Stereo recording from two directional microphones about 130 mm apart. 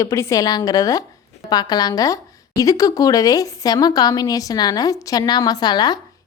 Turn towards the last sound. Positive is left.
turn(degrees=30)  # may be behind; listen again after turning